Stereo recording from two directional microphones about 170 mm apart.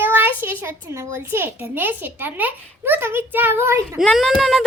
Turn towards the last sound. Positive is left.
turn(degrees=0)  # may be behind; listen again after turning